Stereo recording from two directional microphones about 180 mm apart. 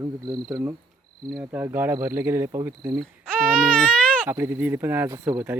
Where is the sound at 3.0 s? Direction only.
5° left (ahead or behind).